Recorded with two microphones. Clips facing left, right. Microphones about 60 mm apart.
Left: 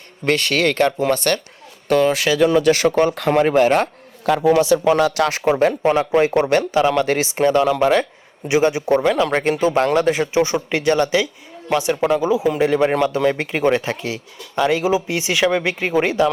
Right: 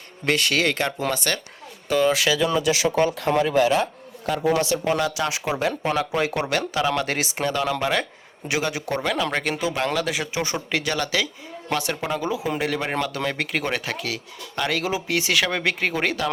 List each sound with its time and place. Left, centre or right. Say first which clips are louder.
0.3 s speech: left 4 dB; left
4.3 s speech: left 7 dB; left
5.3 s speech: left 8 dB; left